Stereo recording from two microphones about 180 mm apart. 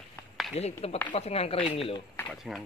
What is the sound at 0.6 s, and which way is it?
Speech, 35° left (ahead or behind).